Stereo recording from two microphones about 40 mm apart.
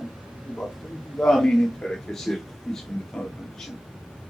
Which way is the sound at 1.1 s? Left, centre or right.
Centre.